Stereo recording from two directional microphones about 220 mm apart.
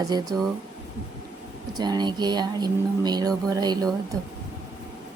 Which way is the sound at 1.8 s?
20° right (ahead or behind).